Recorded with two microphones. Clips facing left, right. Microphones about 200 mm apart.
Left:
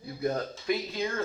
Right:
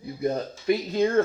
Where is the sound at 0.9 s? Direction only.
45° right (ahead or behind).